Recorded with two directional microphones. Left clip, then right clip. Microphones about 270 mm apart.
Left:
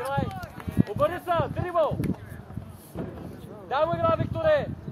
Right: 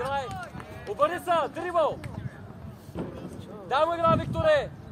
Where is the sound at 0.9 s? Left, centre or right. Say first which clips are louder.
Right 1 dB; right.